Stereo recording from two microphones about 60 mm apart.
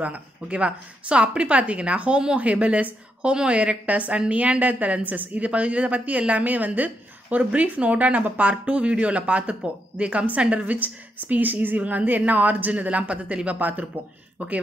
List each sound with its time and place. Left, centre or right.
0.0 s a woman's voice: right